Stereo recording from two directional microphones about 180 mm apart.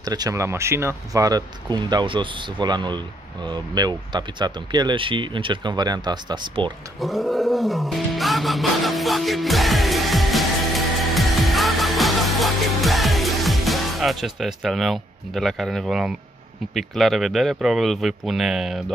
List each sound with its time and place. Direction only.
0.0 s speech: 20° right (ahead or behind)
7.0 s music: centre (ahead or behind)
16.7 s speech: centre (ahead or behind)